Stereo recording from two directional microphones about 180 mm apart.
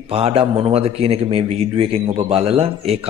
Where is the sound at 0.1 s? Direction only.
30° right (ahead or behind).